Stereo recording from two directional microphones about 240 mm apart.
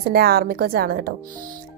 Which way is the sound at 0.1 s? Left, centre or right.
Right.